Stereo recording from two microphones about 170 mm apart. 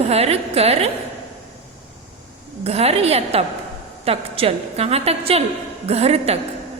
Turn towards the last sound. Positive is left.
turn(degrees=-35)  # may be behind; listen again after turning